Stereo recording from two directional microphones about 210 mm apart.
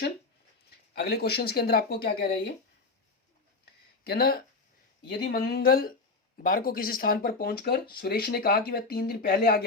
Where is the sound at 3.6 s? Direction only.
45° left (ahead or behind).